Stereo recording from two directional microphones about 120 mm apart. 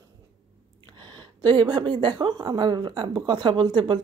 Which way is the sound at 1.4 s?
35° right (ahead or behind).